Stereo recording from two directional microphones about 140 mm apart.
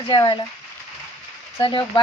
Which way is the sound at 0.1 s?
35° left (ahead or behind).